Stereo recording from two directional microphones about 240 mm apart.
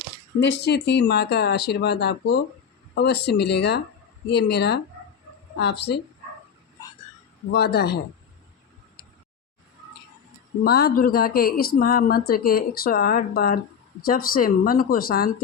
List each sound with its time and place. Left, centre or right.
0.3 s speech: left
7.5 s a woman's voice: left
10.6 s a woman's voice: left